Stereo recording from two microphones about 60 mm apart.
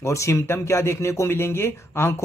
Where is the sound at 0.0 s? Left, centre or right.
Left.